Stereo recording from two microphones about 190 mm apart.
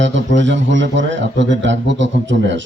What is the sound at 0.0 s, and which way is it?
A man's voice, 75° right (ahead or behind).